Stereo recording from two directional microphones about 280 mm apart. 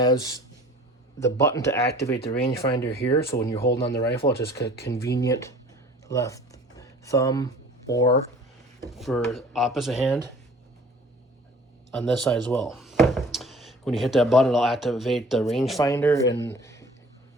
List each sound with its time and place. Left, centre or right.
0.0 s speech: centre
2.1 s speech: left
4.3 s speech: left
5.1 s speech: centre
6.1 s a sound: centre
9.0 s speech: centre
11.9 s speech: centre
15.8 s speech: centre
16.5 s a sound: centre